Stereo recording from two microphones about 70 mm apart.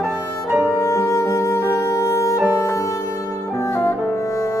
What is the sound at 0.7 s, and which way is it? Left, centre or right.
Music, left.